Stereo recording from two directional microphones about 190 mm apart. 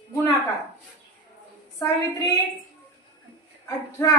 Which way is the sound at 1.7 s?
20° left (ahead or behind).